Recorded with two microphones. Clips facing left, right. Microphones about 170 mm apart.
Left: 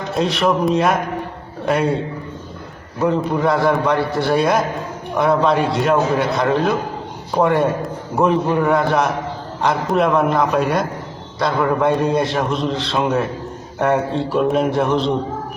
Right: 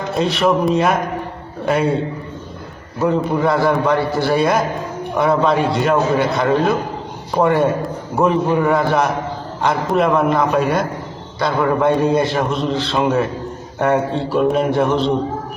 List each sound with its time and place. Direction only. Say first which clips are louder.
0.1 s a man's voice: right 1 dB; centre (ahead or behind)
3.0 s a man's voice: right 1 dB; centre (ahead or behind)